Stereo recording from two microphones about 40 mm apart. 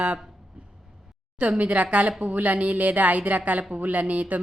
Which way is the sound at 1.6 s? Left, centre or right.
Right.